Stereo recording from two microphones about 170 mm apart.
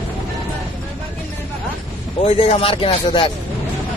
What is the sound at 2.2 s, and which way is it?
Speech, 30° left (ahead or behind).